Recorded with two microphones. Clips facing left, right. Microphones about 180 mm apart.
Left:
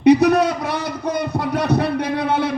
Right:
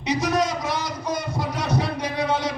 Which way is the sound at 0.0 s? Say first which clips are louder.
Left 10 dB; 60° left (ahead or behind).